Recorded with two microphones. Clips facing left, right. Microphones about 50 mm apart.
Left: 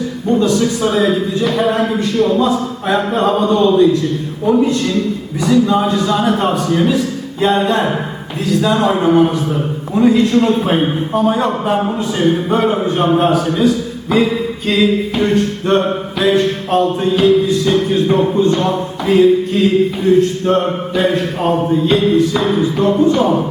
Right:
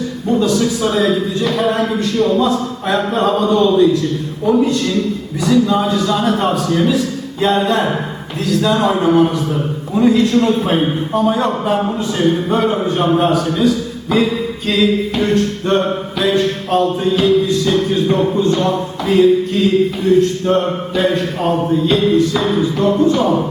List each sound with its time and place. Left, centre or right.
0.3 s a man's voice: centre